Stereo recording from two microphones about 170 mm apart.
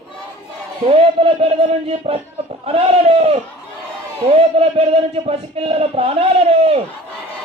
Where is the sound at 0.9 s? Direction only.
35° right (ahead or behind).